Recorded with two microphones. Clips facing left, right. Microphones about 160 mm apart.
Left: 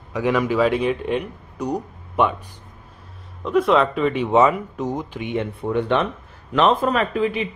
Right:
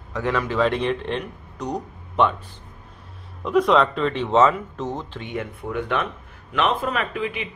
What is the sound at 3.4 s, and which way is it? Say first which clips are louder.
Speech: left 1 dB; centre (ahead or behind).